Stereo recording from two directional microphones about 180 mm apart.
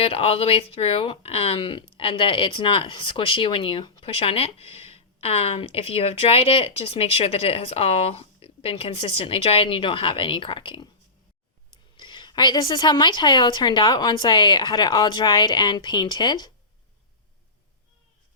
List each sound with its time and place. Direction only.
0.0 s speech: 30° left (ahead or behind)
11.9 s a woman's voice: 25° left (ahead or behind)